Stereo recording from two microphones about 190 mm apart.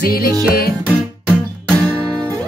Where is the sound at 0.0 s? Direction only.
55° left (ahead or behind).